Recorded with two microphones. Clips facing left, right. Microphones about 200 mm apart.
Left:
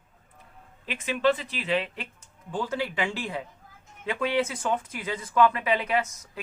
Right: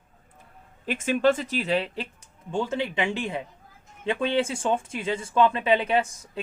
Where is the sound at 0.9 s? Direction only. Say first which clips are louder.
Right 3 dB; 45° right (ahead or behind).